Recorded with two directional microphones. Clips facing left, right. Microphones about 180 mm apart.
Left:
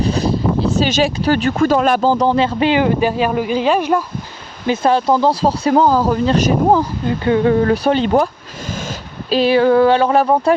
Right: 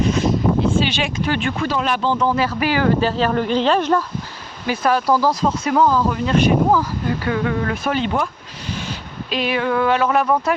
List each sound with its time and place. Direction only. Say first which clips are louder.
0.0 s speech: left 1 dB; 35° left (ahead or behind); by 4.0 s 10° left (ahead or behind)
4.6 s speech: left 4 dB; 25° left (ahead or behind)
9.3 s speech: left 8 dB; 35° left (ahead or behind)